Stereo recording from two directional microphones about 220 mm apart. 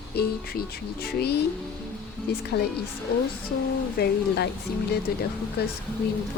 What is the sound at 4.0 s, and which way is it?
Speech, 50° left (ahead or behind).